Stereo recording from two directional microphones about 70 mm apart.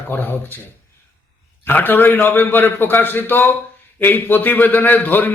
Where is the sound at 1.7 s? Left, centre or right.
Left.